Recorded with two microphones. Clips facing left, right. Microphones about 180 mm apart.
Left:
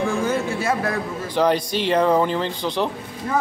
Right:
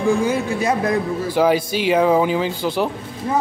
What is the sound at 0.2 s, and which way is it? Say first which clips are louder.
Speech: right 3 dB; 15° right (ahead or behind).